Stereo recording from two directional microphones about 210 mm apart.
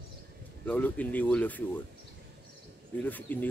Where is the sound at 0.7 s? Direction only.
5° left (ahead or behind).